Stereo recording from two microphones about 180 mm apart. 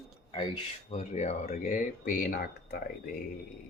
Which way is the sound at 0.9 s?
40° left (ahead or behind).